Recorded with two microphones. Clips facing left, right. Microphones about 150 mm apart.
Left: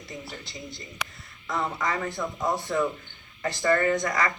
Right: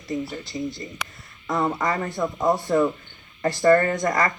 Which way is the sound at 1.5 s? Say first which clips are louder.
Right 5 dB; 40° right (ahead or behind).